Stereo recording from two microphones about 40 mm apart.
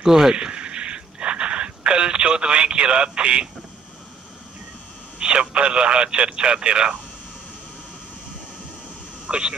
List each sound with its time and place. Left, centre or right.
0.0 s a sound: centre
5.2 s speech: right
9.3 s speech: right